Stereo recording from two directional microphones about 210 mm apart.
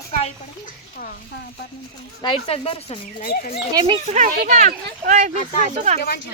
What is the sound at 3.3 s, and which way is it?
Speech, 45° left (ahead or behind).